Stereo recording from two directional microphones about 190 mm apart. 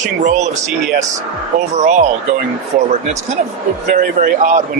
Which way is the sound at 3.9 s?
45° right (ahead or behind).